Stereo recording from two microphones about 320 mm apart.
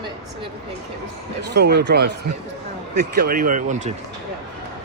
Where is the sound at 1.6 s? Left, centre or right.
Right.